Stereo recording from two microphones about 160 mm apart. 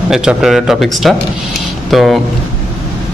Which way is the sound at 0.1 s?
5° right (ahead or behind).